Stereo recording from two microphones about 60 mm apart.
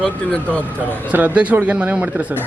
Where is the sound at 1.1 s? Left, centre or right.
Right.